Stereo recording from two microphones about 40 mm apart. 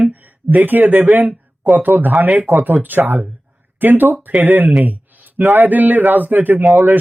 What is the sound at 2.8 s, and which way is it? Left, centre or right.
Speech, centre.